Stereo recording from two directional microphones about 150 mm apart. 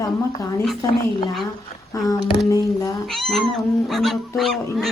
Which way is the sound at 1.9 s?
25° left (ahead or behind).